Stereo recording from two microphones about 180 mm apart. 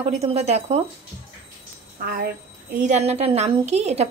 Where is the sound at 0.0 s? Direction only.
35° right (ahead or behind).